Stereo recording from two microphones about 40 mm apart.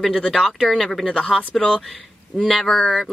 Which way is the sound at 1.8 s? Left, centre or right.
Centre.